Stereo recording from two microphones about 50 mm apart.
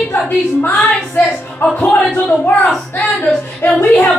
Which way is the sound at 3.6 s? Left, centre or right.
Left.